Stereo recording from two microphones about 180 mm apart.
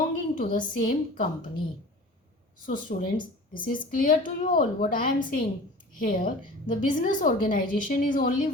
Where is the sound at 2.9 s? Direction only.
50° left (ahead or behind).